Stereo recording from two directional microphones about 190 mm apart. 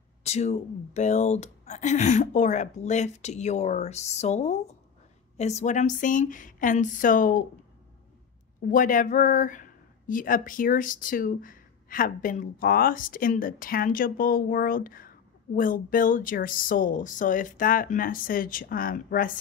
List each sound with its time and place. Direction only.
0.2 s speech: 35° left (ahead or behind)
8.6 s speech: 45° left (ahead or behind)